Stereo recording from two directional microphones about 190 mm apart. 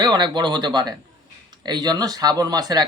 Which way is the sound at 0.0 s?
20° right (ahead or behind).